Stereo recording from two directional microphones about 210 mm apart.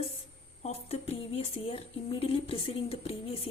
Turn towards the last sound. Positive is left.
turn(degrees=25)  # may be behind; listen again after turning